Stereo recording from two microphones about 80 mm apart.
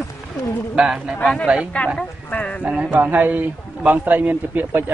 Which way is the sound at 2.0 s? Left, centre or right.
Centre.